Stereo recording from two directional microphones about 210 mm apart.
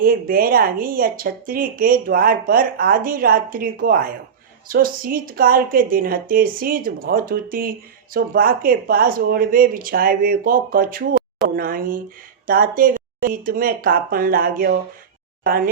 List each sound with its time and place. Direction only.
0.0 s a woman's voice: 45° right (ahead or behind)